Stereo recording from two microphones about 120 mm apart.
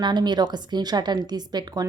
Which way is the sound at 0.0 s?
40° right (ahead or behind).